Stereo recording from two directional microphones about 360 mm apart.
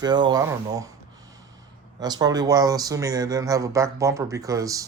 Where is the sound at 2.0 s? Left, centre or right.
Centre.